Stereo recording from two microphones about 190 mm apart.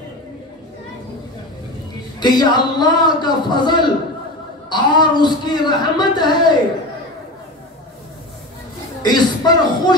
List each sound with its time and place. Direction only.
2.1 s speech: 20° left (ahead or behind)
9.0 s speech: 20° left (ahead or behind)